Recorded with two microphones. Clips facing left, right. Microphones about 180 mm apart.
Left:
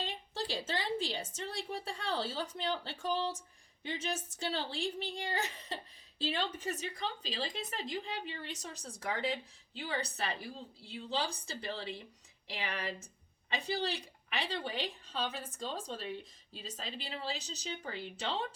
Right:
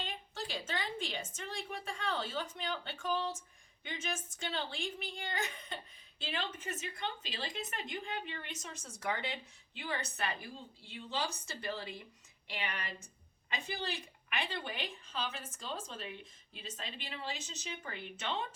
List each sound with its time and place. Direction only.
0.0 s a woman's voice: 30° left (ahead or behind)